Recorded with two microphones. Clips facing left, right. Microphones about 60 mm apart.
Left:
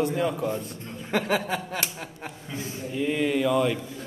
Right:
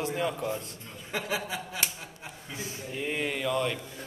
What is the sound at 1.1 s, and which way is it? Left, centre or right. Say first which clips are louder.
Speech: left 7 dB; left.